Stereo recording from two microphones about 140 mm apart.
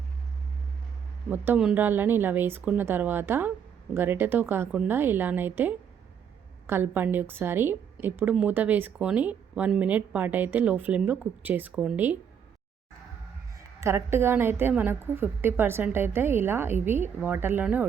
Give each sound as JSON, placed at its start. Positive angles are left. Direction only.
{"t": 1.3, "sound": "speech", "side_deg": -10}
{"t": 13.8, "sound": "speech", "side_deg": -15}